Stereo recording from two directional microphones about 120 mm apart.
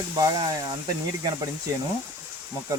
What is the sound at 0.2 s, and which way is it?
Speech, 35° right (ahead or behind).